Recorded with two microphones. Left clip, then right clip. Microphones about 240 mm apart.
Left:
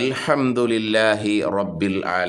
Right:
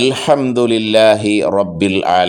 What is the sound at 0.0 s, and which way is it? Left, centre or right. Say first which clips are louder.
Speech: right 7 dB; centre.